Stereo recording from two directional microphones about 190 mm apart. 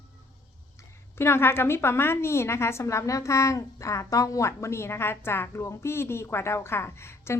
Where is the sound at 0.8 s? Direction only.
15° left (ahead or behind).